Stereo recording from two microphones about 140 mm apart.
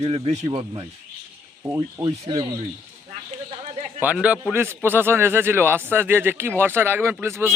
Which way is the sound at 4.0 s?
10° right (ahead or behind).